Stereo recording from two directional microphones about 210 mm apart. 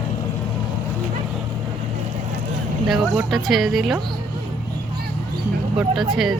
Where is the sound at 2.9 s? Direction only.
Centre (ahead or behind).